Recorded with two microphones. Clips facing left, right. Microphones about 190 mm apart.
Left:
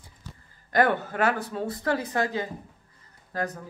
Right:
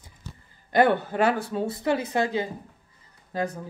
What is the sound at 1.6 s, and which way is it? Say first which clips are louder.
Speech: right 2 dB; 10° right (ahead or behind).